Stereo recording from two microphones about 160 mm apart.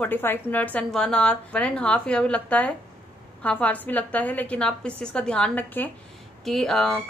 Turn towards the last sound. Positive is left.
turn(degrees=0)  # may be behind; listen again after turning